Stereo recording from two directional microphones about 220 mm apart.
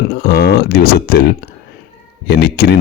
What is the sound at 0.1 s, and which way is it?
Speech, 45° left (ahead or behind).